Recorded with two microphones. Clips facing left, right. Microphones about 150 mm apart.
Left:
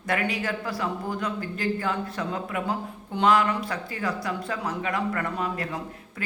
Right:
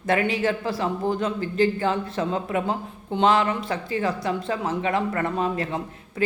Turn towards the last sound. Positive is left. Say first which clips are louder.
# right 4 dB
turn(degrees=-25)  # may be behind; listen again after turning